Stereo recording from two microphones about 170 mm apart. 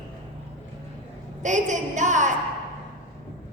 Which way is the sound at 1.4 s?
45° right (ahead or behind).